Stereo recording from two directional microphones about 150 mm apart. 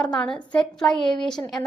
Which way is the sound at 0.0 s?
5° left (ahead or behind).